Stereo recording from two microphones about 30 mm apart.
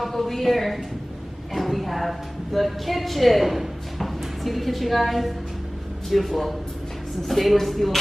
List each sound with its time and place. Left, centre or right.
0.0 s a woman's voice: centre